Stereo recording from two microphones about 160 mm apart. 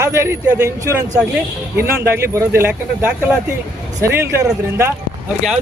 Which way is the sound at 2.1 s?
15° right (ahead or behind).